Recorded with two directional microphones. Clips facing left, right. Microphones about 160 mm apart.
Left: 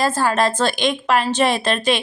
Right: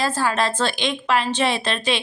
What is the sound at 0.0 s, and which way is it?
Speech, 45° left (ahead or behind).